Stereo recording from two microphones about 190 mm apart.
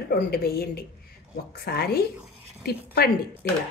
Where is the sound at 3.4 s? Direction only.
55° left (ahead or behind).